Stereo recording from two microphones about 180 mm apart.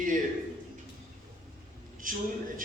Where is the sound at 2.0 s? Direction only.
50° right (ahead or behind).